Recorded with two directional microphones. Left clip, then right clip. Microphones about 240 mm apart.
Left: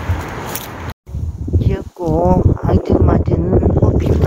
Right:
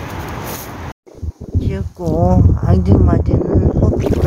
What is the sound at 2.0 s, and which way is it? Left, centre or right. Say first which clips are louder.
Speech: left 2 dB; centre.